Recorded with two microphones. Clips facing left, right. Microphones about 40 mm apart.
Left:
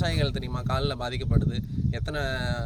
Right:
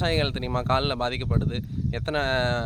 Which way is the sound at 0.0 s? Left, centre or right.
Right.